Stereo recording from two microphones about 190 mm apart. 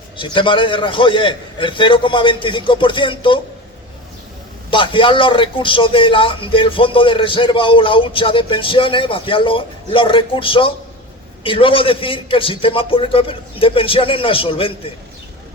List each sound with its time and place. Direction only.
0.2 s a man's voice: 25° left (ahead or behind)
4.7 s a man's voice: 25° left (ahead or behind)